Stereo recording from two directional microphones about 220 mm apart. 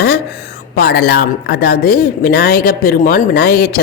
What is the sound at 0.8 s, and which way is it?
A woman's voice, 45° left (ahead or behind).